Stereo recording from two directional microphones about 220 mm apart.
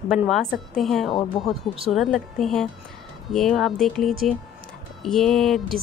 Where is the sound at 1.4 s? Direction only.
20° left (ahead or behind).